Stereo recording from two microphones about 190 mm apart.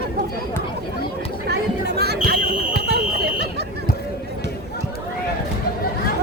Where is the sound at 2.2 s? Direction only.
55° right (ahead or behind).